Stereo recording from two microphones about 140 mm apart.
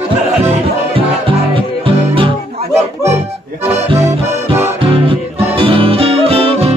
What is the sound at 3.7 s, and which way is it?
Accordion, 20° right (ahead or behind).